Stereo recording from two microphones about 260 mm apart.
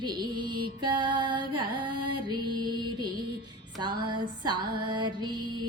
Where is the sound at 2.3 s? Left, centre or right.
Centre.